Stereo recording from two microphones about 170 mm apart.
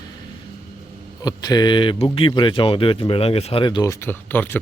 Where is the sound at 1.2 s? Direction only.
25° left (ahead or behind).